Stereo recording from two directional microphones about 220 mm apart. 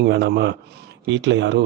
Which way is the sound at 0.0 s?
50° right (ahead or behind).